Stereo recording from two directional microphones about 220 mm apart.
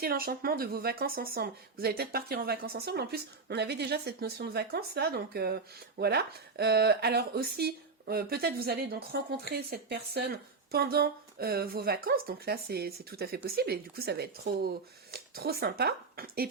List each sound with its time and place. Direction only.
0.0 s speech: 45° right (ahead or behind)